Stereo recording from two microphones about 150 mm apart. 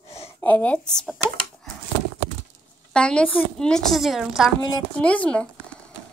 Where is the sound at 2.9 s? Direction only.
5° left (ahead or behind).